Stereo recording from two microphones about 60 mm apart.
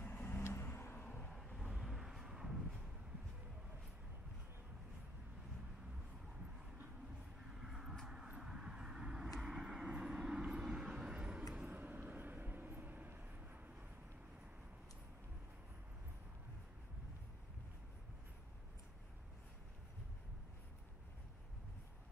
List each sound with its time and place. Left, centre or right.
0.0 s vehicle: left
1.3 s vehicle: centre
7.5 s vehicle: centre
11.7 s vehicle: right